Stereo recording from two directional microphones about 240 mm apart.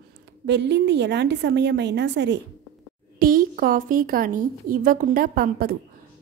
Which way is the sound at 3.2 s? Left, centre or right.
Right.